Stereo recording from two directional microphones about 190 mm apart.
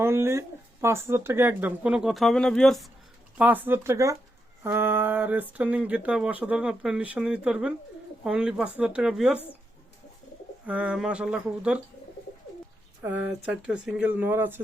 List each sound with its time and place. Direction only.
0.0 s speech: 15° right (ahead or behind)
10.7 s speech: 5° right (ahead or behind)
13.0 s speech: 5° right (ahead or behind)